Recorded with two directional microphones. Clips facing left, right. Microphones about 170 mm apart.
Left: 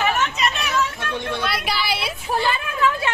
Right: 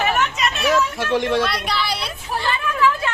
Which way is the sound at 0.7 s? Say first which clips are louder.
Right 6 dB; 90° right.